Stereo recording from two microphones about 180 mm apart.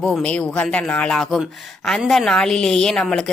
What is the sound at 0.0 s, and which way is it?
A man's voice, centre (ahead or behind).